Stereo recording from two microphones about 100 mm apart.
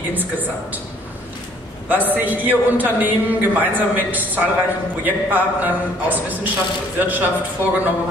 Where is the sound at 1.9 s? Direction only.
20° right (ahead or behind).